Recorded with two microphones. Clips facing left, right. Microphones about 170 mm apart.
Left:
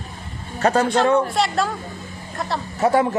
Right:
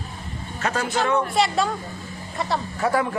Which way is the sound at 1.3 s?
Centre (ahead or behind).